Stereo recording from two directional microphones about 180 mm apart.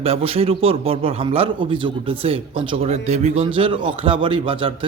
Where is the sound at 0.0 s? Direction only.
35° right (ahead or behind).